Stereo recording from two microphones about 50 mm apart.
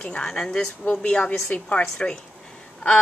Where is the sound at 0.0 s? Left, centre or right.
Left.